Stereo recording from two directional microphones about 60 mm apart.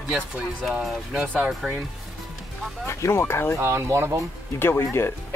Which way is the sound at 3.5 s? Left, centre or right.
Right.